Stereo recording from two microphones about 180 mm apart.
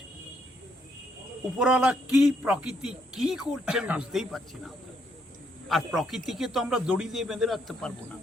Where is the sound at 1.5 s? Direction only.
5° right (ahead or behind).